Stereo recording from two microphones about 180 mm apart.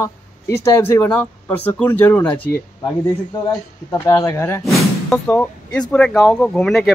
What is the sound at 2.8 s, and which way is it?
Speech, 20° left (ahead or behind).